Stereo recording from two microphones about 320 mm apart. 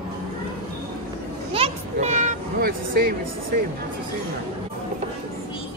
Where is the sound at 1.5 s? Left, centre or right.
Centre.